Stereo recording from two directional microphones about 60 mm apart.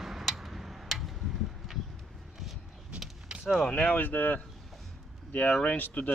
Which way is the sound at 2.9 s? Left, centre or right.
Centre.